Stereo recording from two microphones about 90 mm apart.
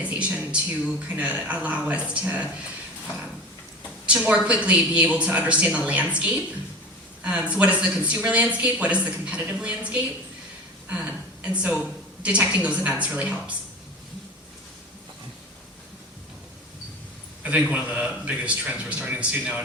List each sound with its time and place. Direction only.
0.0 s speech: 15° right (ahead or behind)
4.0 s a woman's voice: 10° right (ahead or behind)
17.4 s speech: 15° right (ahead or behind)